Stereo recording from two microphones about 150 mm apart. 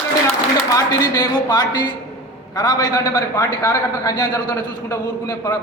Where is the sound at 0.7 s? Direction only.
25° left (ahead or behind).